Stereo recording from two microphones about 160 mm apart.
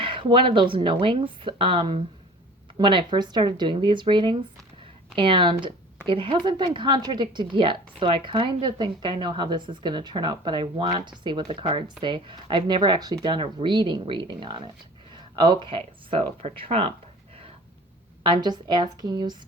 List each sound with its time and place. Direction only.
0.0 s a woman's voice: 30° right (ahead or behind)
18.2 s a woman's voice: 30° right (ahead or behind)